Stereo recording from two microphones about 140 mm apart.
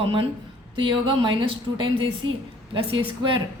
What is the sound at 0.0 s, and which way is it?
A woman's voice, 40° right (ahead or behind).